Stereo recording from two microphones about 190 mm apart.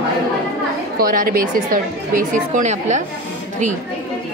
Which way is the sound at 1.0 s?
50° right (ahead or behind).